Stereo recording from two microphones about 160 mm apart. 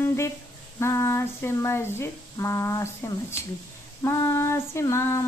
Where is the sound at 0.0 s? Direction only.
15° left (ahead or behind).